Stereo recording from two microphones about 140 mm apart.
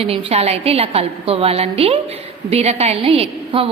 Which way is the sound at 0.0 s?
45° right (ahead or behind).